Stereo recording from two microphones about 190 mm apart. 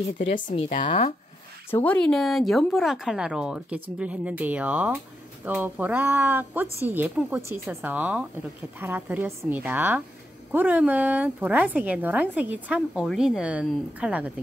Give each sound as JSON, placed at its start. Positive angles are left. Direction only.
{"t": 0.6, "sound": "speech", "side_deg": 35}
{"t": 1.7, "sound": "speech", "side_deg": 10}